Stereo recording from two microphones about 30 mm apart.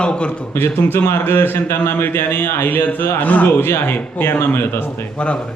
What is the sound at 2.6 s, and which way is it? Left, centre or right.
Speech, left.